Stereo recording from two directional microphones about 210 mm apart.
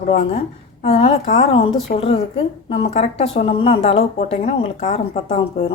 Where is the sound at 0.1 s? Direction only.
30° left (ahead or behind).